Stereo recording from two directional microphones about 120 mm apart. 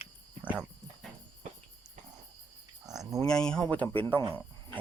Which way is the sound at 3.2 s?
5° left (ahead or behind).